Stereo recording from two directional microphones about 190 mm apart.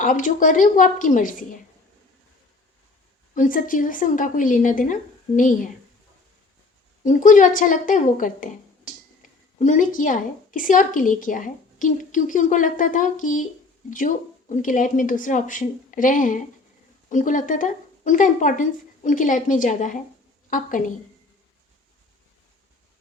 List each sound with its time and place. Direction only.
0.0 s a woman's voice: 45° left (ahead or behind)
3.3 s a woman's voice: 45° left (ahead or behind)
7.0 s a woman's voice: 40° left (ahead or behind)